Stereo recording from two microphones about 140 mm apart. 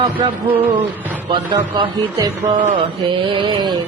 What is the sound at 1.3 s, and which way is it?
Music, 35° right (ahead or behind).